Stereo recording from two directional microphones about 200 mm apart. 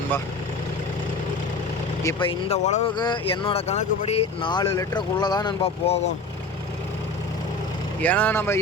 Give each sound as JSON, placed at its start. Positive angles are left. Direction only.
{"t": 2.0, "sound": "speech", "side_deg": 25}
{"t": 2.9, "sound": "speech", "side_deg": 20}
{"t": 8.0, "sound": "speech", "side_deg": 5}